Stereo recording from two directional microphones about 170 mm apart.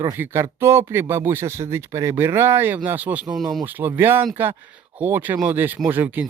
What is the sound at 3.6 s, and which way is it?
Speech, 10° right (ahead or behind).